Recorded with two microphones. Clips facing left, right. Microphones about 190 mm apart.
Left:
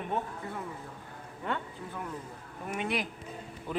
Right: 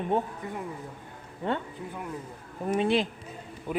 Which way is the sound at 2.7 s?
30° right (ahead or behind).